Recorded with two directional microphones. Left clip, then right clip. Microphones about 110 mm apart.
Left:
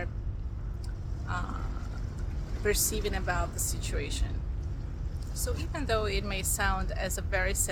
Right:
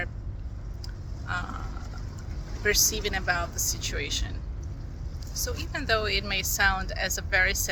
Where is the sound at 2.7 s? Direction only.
30° left (ahead or behind).